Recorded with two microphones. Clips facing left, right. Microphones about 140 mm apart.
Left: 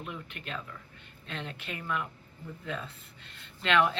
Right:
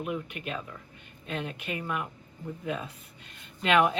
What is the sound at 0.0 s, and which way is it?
A woman's voice, 10° right (ahead or behind).